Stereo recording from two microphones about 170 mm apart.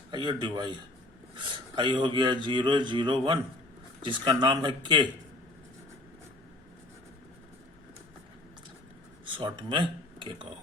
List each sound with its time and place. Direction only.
0.1 s speech: 25° right (ahead or behind)
9.2 s speech: 30° right (ahead or behind)